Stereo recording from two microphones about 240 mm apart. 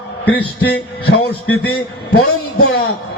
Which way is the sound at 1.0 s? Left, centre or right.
Left.